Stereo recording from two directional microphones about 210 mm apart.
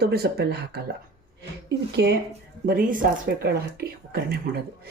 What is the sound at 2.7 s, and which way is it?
Speech, 40° right (ahead or behind).